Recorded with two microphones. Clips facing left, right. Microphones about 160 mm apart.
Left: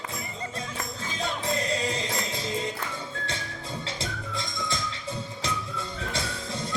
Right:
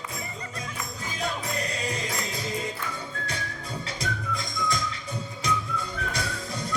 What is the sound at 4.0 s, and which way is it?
Music, 25° left (ahead or behind).